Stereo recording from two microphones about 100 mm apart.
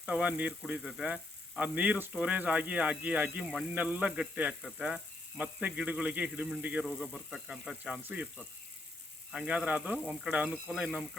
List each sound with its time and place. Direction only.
0.0 s speech: 10° right (ahead or behind)
6.8 s speech: 5° right (ahead or behind)
8.0 s speech: 15° right (ahead or behind)
9.3 s speech: 10° right (ahead or behind)